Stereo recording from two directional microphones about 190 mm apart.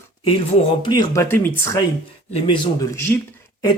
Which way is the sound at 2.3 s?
25° left (ahead or behind).